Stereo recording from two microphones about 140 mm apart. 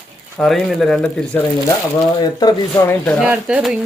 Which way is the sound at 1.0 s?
15° left (ahead or behind).